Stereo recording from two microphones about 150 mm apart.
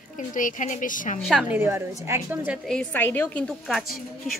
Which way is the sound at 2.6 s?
10° left (ahead or behind).